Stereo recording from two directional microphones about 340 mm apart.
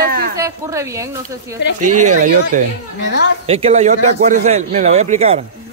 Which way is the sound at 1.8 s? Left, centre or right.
Right.